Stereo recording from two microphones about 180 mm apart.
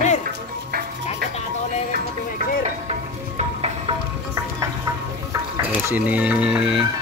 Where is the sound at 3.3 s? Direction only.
35° right (ahead or behind).